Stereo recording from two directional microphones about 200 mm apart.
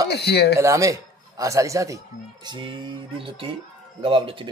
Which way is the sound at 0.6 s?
15° right (ahead or behind).